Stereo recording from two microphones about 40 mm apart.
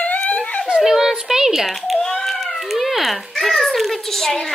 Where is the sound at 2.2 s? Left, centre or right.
Centre.